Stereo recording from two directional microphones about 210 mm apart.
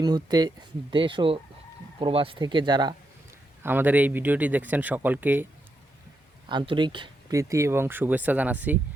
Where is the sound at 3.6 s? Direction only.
10° right (ahead or behind).